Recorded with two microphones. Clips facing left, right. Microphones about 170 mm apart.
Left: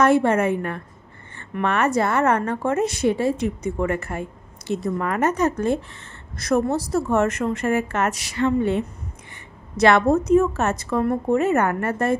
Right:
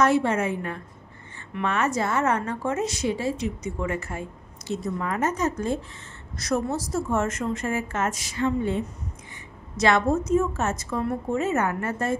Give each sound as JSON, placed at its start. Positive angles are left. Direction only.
{"t": 0.0, "sound": "a woman's voice", "side_deg": 55}